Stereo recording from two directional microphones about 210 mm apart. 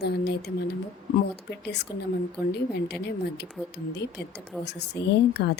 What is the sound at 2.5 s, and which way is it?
Speech, 50° left (ahead or behind).